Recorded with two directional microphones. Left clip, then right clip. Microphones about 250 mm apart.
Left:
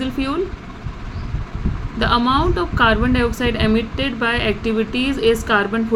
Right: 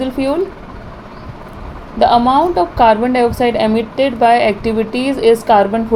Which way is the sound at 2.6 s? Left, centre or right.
Centre.